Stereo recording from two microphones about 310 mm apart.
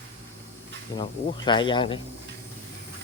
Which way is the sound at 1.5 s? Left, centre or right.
Centre.